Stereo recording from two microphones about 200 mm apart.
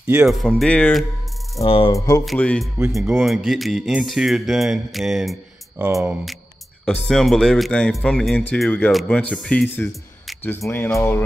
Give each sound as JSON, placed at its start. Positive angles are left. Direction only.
{"t": 0.0, "sound": "speech", "side_deg": -10}
{"t": 1.6, "sound": "speech", "side_deg": 25}
{"t": 2.2, "sound": "speech", "side_deg": 5}
{"t": 5.9, "sound": "speech", "side_deg": -15}
{"t": 6.9, "sound": "speech", "side_deg": 0}